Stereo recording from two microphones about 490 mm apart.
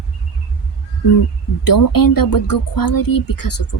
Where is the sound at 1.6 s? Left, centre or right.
Left.